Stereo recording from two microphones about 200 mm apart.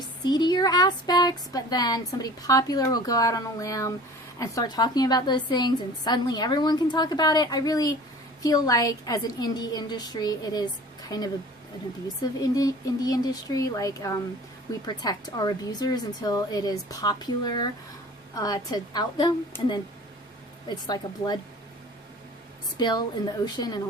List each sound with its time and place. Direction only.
0.3 s speech: 20° left (ahead or behind)
12.0 s speech: 15° left (ahead or behind)
22.8 s speech: 20° left (ahead or behind)